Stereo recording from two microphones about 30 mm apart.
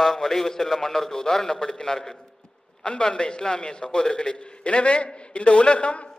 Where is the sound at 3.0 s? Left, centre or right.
Left.